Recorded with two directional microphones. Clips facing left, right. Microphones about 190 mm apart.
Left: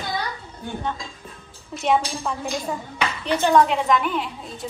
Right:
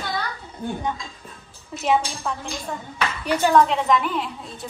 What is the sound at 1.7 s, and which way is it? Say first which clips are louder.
A woman's voice: even; centre (ahead or behind).